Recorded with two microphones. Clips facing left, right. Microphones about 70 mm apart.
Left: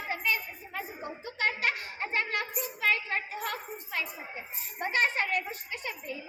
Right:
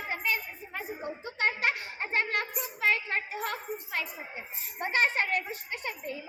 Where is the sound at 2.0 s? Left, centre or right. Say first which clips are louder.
Right 2 dB; right.